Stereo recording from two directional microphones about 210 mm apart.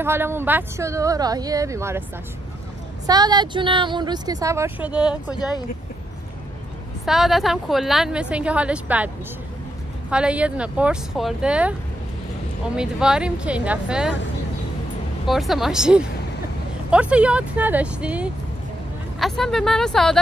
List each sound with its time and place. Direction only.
0.0 s speech: 10° right (ahead or behind)
3.1 s speech: 20° right (ahead or behind)
7.1 s a woman's voice: centre (ahead or behind)
12.7 s a woman's voice: 5° right (ahead or behind)
15.2 s a woman's voice: centre (ahead or behind)